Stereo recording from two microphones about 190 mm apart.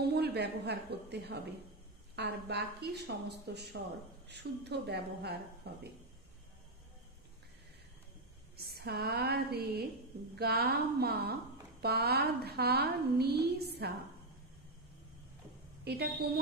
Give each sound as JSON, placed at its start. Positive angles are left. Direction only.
{"t": 0.0, "sound": "a woman's voice", "side_deg": -60}
{"t": 8.5, "sound": "a woman's voice", "side_deg": -55}
{"t": 15.8, "sound": "a woman's voice", "side_deg": -60}